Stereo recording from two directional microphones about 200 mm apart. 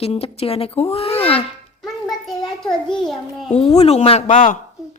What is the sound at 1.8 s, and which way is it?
Child singing, centre (ahead or behind).